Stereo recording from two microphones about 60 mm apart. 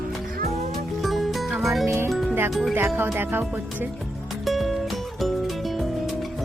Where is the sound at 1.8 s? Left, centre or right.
Right.